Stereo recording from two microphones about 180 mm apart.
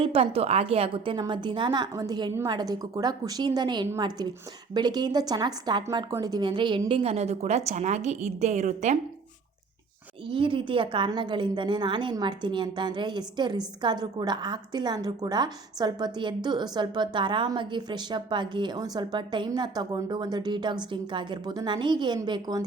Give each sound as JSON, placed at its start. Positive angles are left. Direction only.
{"t": 0.0, "sound": "a woman's voice", "side_deg": -30}
{"t": 10.2, "sound": "a woman's voice", "side_deg": -30}